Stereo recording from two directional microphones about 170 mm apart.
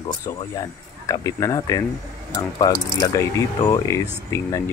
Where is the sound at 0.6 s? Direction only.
20° left (ahead or behind).